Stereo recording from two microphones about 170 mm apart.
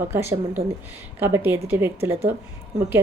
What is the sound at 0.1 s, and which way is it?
A woman's voice, 15° right (ahead or behind).